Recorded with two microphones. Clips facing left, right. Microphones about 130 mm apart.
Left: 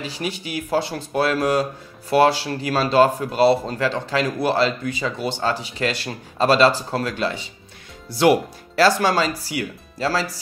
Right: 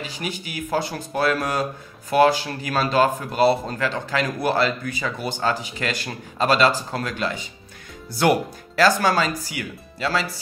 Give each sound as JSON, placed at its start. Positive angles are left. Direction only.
{"t": 0.0, "sound": "speech", "side_deg": 35}